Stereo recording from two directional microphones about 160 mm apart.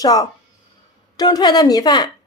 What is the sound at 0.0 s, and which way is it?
A woman's voice, 25° left (ahead or behind).